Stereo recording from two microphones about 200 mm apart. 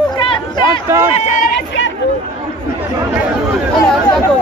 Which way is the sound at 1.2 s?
40° left (ahead or behind).